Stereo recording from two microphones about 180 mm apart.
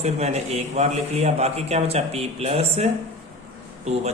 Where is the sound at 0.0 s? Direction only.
35° right (ahead or behind).